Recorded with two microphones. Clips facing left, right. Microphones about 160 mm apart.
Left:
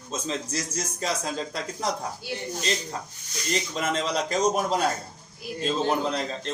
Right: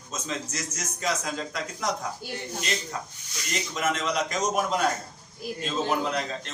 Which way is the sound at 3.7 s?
30° left (ahead or behind).